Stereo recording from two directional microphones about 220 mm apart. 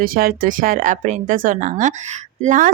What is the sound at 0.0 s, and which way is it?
Speech, 40° right (ahead or behind).